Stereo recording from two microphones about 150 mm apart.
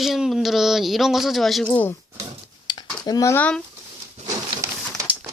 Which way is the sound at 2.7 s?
25° left (ahead or behind).